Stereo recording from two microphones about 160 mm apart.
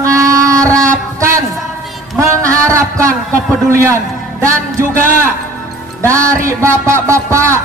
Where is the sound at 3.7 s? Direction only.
15° right (ahead or behind).